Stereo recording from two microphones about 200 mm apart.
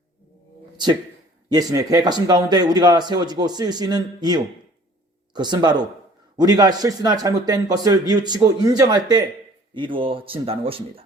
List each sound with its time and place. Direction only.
1.5 s speech: 20° right (ahead or behind)